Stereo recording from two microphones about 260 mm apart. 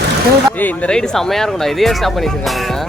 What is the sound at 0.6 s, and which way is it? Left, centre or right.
Speech, centre.